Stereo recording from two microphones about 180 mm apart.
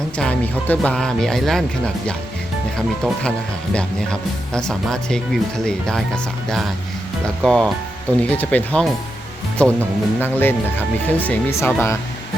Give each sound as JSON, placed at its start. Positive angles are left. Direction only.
{"t": 0.2, "sound": "speech", "side_deg": 10}
{"t": 7.4, "sound": "speech", "side_deg": 0}